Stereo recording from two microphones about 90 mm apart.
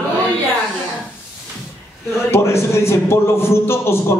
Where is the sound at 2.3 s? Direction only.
30° left (ahead or behind).